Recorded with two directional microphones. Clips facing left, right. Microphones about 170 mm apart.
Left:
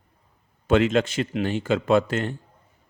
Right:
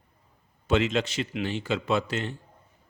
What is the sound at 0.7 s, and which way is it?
Speech, 50° left (ahead or behind).